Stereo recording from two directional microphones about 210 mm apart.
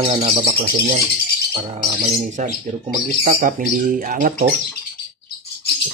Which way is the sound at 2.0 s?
35° right (ahead or behind).